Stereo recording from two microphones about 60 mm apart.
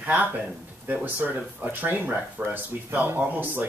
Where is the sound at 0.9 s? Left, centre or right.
Right.